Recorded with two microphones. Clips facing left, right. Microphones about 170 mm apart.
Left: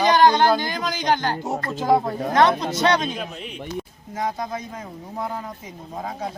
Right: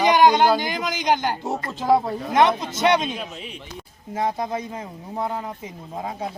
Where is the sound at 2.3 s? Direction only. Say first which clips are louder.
Even; 20° right (ahead or behind).